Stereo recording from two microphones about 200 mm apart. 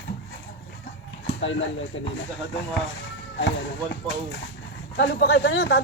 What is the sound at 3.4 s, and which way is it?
Speech, 65° left (ahead or behind).